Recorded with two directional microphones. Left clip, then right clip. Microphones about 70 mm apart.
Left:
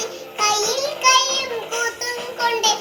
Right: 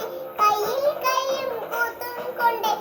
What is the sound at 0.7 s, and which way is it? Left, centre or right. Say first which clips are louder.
Child singing: left 5 dB; right.